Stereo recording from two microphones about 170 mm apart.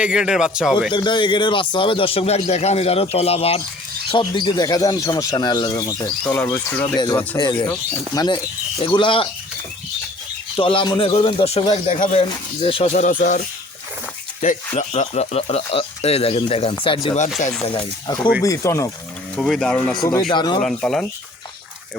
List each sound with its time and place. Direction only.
0.0 s speech: 5° right (ahead or behind)
0.9 s speech: 25° left (ahead or behind)
6.2 s speech: 10° left (ahead or behind)
6.9 s speech: 25° left (ahead or behind)
10.6 s speech: 30° left (ahead or behind)
12.9 s speech: 45° left (ahead or behind)
14.4 s speech: 45° left (ahead or behind); by 18.9 s 15° left (ahead or behind)
19.4 s speech: centre (ahead or behind)
20.3 s speech: 25° left (ahead or behind)
20.6 s speech: 5° left (ahead or behind)